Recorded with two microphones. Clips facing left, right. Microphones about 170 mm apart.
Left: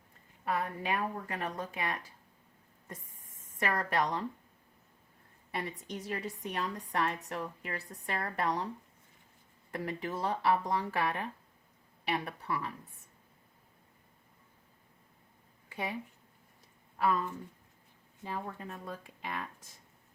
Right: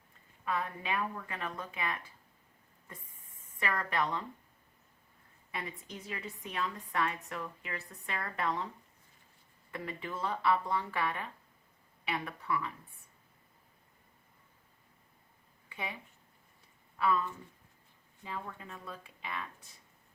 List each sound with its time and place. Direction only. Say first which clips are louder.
0.4 s a woman's voice: left 2 dB; 40° left (ahead or behind)
3.4 s speech: left 3 dB; 40° left (ahead or behind)
5.5 s a woman's voice: left 4 dB; 40° left (ahead or behind)
9.7 s a woman's voice: left 4 dB; 45° left (ahead or behind)
15.7 s speech: left 4 dB; 40° left (ahead or behind)
17.0 s speech: left 1 dB; 45° left (ahead or behind)